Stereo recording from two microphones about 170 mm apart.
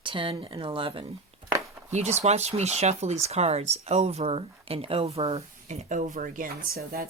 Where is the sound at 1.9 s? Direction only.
40° right (ahead or behind).